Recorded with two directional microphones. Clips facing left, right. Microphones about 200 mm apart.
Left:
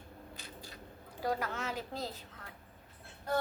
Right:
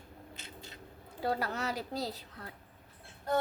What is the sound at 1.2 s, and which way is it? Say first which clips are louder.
Speech: right 2 dB; 30° right (ahead or behind).